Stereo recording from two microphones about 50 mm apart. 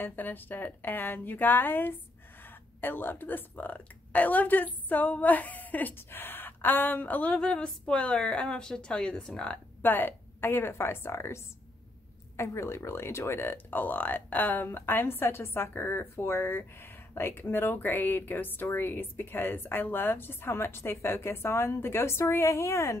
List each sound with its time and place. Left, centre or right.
0.0 s a woman's voice: left
5.9 s speech: left
7.3 s a woman's voice: centre
9.8 s speech: left